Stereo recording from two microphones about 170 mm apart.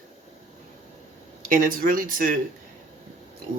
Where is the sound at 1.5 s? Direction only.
55° right (ahead or behind).